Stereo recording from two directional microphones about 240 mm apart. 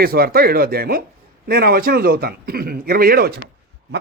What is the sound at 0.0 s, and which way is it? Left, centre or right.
A man's voice, right.